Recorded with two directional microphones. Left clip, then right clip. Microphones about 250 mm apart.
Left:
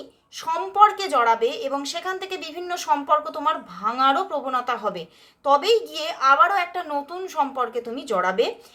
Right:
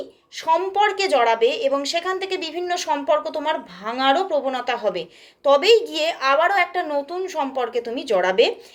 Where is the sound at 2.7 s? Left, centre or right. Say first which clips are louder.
Even; left.